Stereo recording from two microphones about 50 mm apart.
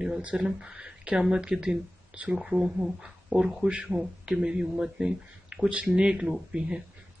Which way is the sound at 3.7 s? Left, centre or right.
Right.